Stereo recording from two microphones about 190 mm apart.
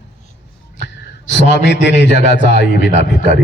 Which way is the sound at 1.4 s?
65° left (ahead or behind).